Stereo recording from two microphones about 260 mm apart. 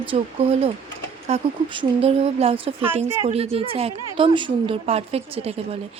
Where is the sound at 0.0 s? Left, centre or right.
Right.